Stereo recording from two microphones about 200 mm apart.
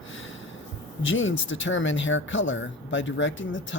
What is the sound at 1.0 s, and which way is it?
Speech, 75° left (ahead or behind).